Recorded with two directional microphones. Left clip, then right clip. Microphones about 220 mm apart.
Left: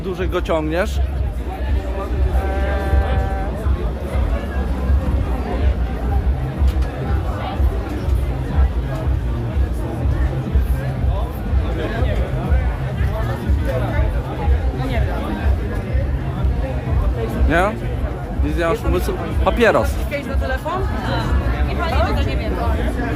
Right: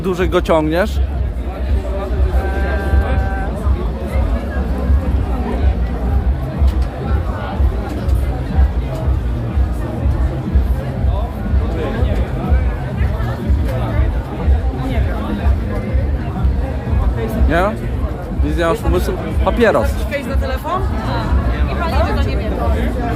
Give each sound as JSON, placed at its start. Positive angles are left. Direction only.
{"t": 0.0, "sound": "speech", "side_deg": -25}
{"t": 17.5, "sound": "speech", "side_deg": 5}
{"t": 21.8, "sound": "hubbub", "side_deg": -10}